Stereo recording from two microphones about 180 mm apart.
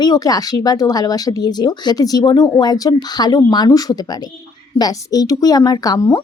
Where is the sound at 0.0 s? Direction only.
20° left (ahead or behind).